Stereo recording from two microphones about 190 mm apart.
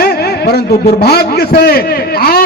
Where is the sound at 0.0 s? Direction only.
55° left (ahead or behind).